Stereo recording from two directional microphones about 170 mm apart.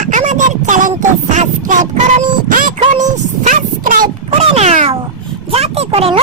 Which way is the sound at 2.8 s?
45° right (ahead or behind).